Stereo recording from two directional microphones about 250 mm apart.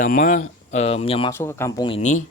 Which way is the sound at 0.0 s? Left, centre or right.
Left.